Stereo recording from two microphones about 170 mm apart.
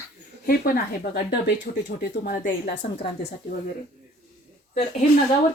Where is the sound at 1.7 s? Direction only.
75° left (ahead or behind).